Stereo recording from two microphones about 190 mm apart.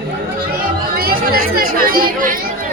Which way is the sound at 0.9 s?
50° right (ahead or behind).